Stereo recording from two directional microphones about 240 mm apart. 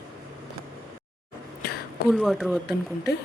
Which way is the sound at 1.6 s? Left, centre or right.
Left.